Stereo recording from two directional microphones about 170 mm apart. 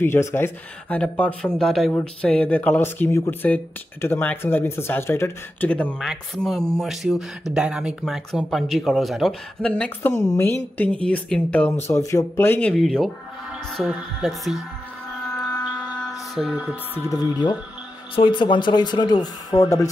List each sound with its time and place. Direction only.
0.0 s speech: 15° left (ahead or behind); by 14.6 s centre (ahead or behind)
16.1 s music: centre (ahead or behind)
16.9 s speech: 15° left (ahead or behind)
18.1 s speech: 30° left (ahead or behind)